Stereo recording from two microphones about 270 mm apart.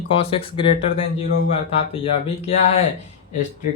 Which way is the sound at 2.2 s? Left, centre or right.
Left.